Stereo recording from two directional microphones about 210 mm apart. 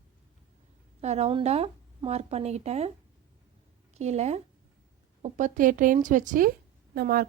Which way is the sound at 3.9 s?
30° right (ahead or behind).